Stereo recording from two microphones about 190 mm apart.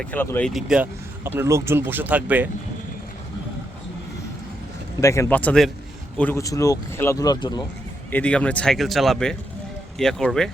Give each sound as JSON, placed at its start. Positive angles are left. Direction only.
{"t": 0.0, "sound": "speech", "side_deg": 10}
{"t": 4.9, "sound": "speech", "side_deg": 15}
{"t": 8.1, "sound": "speech", "side_deg": 5}